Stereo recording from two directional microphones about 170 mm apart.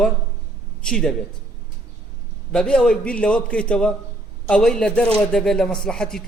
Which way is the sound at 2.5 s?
5° left (ahead or behind).